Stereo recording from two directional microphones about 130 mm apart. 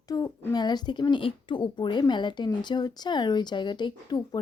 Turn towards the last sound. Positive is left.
turn(degrees=35)  # may be behind; listen again after turning